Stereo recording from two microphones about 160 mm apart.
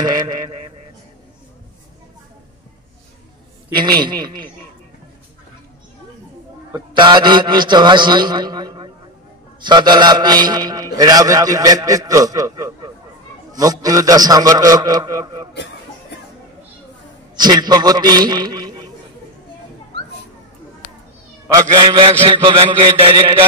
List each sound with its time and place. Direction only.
0.0 s a man's voice: 25° right (ahead or behind)
3.7 s a man's voice: 30° right (ahead or behind)
7.0 s a man's voice: 30° right (ahead or behind)
17.4 s a man's voice: 25° right (ahead or behind)
21.5 s mantra: 30° right (ahead or behind)